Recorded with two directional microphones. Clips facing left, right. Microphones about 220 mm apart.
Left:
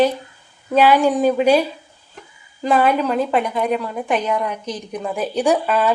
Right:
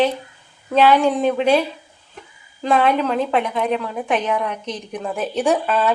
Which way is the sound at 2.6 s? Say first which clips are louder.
Left 1 dB; 5° left (ahead or behind).